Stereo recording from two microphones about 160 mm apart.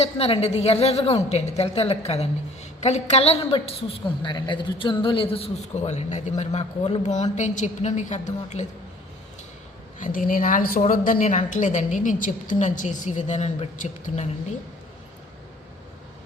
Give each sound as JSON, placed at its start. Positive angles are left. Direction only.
{"t": 0.0, "sound": "a woman's voice", "side_deg": 40}
{"t": 10.0, "sound": "a woman's voice", "side_deg": 60}